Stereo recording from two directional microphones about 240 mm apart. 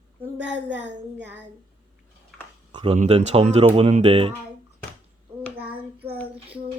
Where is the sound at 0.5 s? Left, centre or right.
Right.